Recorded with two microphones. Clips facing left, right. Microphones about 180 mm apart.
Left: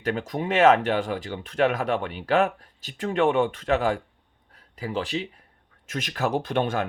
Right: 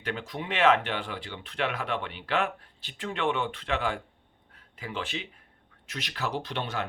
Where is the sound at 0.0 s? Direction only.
45° left (ahead or behind).